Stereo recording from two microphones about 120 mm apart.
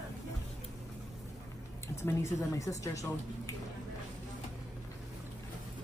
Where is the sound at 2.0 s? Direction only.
25° left (ahead or behind).